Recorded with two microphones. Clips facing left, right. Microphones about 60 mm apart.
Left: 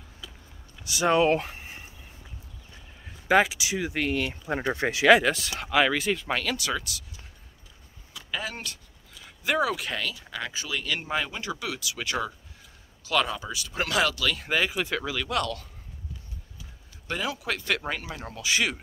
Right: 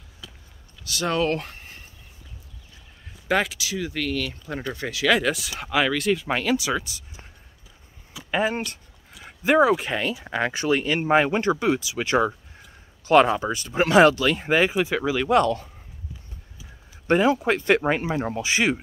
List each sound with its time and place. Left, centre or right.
0.8 s speech: centre
1.4 s a sound: centre
3.3 s speech: centre
3.5 s speech: left
5.3 s speech: centre
6.2 s speech: centre
8.3 s speech: right
10.2 s speech: right
10.8 s speech: right
17.1 s speech: right